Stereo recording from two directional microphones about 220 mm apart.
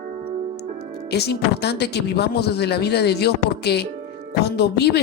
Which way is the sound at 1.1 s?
50° left (ahead or behind).